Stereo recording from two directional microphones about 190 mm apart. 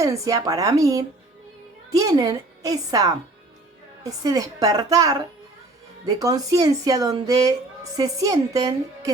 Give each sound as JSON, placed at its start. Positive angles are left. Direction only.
{"t": 0.0, "sound": "a woman's voice", "side_deg": -15}
{"t": 6.1, "sound": "speech", "side_deg": -20}